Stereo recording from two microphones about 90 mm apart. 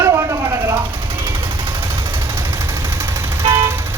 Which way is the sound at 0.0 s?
30° right (ahead or behind).